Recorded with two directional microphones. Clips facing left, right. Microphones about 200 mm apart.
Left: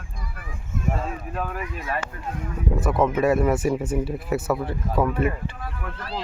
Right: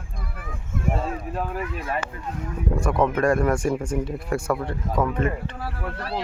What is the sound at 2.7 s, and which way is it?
Speech, 5° left (ahead or behind).